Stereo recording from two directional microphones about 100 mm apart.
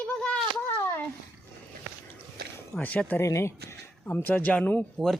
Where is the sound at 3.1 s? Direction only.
30° left (ahead or behind).